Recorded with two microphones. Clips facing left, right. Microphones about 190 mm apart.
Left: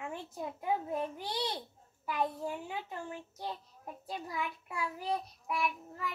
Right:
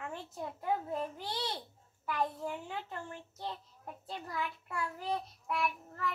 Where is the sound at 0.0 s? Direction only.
15° left (ahead or behind).